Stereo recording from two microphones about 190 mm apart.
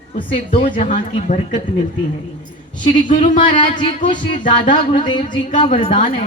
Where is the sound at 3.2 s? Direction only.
30° left (ahead or behind).